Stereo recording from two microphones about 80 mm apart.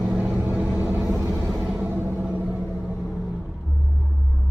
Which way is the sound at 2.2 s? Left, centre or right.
Centre.